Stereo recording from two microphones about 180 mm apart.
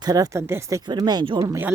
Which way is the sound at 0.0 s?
20° right (ahead or behind).